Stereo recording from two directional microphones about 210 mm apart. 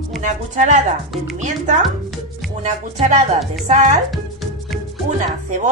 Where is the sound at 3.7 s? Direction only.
35° right (ahead or behind).